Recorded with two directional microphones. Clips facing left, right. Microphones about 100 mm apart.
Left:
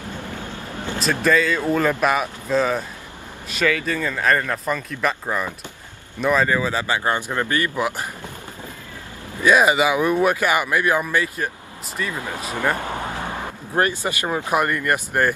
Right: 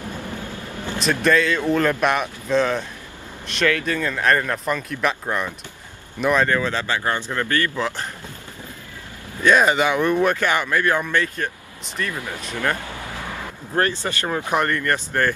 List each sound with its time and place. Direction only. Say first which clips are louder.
1.0 s speech: even; centre (ahead or behind)
9.4 s speech: left 1 dB; 10° left (ahead or behind)
12.1 s speech: left 1 dB; 25° left (ahead or behind)
13.2 s vehicle: left 3 dB; 25° left (ahead or behind)
13.8 s speech: left 1 dB; 15° left (ahead or behind)